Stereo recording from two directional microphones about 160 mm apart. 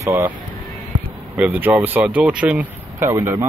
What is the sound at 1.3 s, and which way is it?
Speech, 10° right (ahead or behind).